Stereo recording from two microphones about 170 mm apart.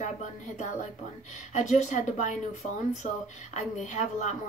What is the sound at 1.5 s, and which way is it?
A woman's voice, 45° left (ahead or behind).